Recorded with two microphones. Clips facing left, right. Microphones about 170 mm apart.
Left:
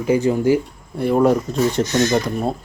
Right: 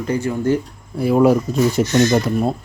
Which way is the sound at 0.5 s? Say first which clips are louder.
Left 1 dB; centre (ahead or behind).